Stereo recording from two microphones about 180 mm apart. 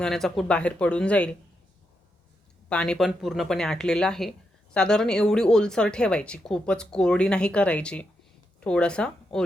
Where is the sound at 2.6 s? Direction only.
5° left (ahead or behind).